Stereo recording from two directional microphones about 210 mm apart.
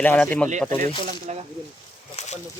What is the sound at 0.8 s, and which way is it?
Speech, 35° right (ahead or behind).